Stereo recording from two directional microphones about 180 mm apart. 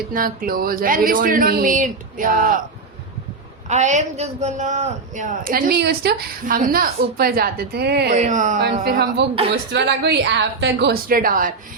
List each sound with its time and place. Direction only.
0.1 s a man's voice: 50° right (ahead or behind)
3.7 s a man's voice: 40° right (ahead or behind); by 8.1 s 65° right (ahead or behind)
8.1 s speech: 40° right (ahead or behind)
8.8 s a woman's voice: 65° right (ahead or behind)